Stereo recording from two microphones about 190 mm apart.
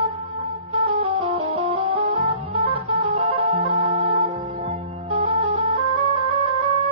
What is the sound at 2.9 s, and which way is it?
Music, 25° right (ahead or behind).